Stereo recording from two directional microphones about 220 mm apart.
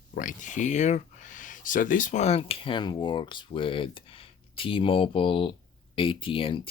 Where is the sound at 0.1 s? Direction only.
35° left (ahead or behind).